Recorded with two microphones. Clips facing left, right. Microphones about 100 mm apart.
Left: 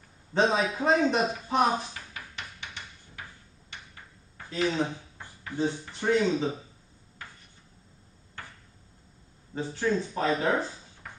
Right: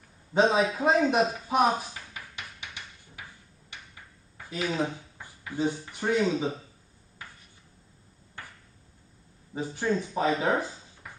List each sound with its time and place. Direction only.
0.3 s a man's voice: 10° right (ahead or behind)
4.4 s a man's voice: 10° right (ahead or behind)
9.5 s a man's voice: 15° right (ahead or behind)